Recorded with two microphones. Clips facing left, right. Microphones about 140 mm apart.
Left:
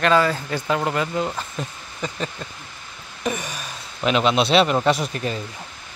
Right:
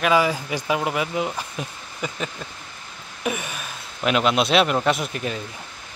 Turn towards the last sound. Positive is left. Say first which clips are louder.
# left 2 dB
turn(degrees=-5)  # may be behind; listen again after turning